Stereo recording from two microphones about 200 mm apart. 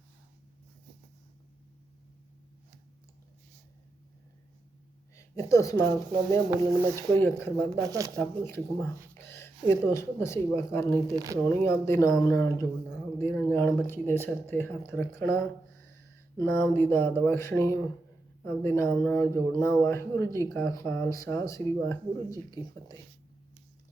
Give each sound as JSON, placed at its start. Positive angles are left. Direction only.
{"t": 5.1, "sound": "speech", "side_deg": 15}
{"t": 6.5, "sound": "speech", "side_deg": -15}
{"t": 7.1, "sound": "speech", "side_deg": 10}
{"t": 7.8, "sound": "speech", "side_deg": -15}
{"t": 8.2, "sound": "speech", "side_deg": 10}
{"t": 9.1, "sound": "a sound", "side_deg": 10}
{"t": 9.6, "sound": "speech", "side_deg": 15}
{"t": 11.1, "sound": "speech", "side_deg": -20}
{"t": 11.4, "sound": "speech", "side_deg": 15}
{"t": 16.4, "sound": "speech", "side_deg": 10}